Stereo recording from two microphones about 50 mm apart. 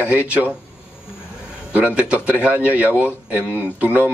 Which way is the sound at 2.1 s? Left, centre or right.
Right.